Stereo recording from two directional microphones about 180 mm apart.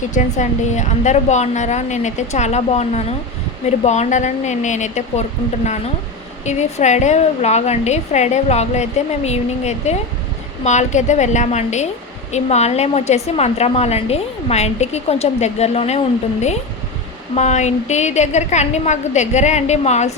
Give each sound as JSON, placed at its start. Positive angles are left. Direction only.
{"t": 0.1, "sound": "a woman's voice", "side_deg": 45}
{"t": 6.4, "sound": "a woman's voice", "side_deg": 40}
{"t": 17.3, "sound": "a woman's voice", "side_deg": 40}